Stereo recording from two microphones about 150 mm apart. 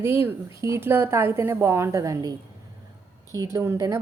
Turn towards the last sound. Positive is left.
turn(degrees=-15)  # may be behind; listen again after turning